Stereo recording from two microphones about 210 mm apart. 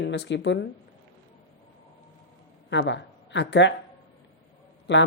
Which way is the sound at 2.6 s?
60° left (ahead or behind).